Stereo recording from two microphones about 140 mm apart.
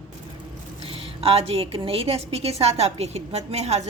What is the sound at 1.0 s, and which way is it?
A woman's voice, 45° right (ahead or behind).